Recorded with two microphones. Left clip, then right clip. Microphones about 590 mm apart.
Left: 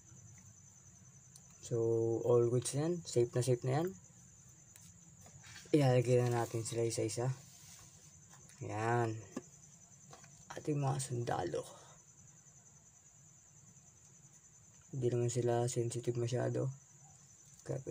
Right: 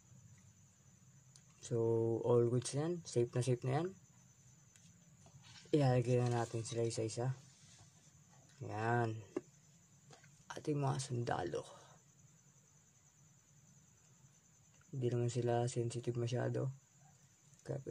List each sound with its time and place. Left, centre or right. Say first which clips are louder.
1.6 s speech: left 2 dB; right
5.7 s speech: left 4 dB; right
8.6 s speech: left 2 dB; right
10.5 s speech: left 1 dB; right
15.0 s speech: left 3 dB; right